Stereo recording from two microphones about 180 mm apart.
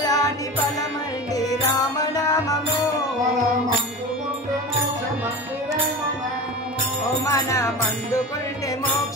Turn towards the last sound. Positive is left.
turn(degrees=15)  # may be behind; listen again after turning